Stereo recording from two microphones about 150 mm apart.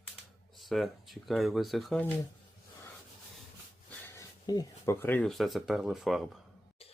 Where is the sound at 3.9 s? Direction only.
15° left (ahead or behind).